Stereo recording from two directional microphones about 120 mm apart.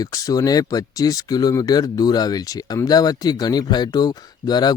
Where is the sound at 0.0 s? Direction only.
30° left (ahead or behind).